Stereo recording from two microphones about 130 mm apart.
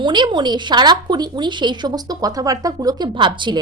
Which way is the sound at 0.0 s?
35° right (ahead or behind).